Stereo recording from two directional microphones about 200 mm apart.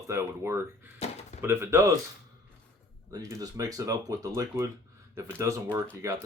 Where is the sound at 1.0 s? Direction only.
30° left (ahead or behind).